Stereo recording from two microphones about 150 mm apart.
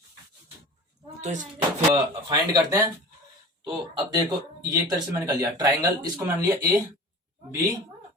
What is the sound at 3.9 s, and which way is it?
Speech, 30° right (ahead or behind).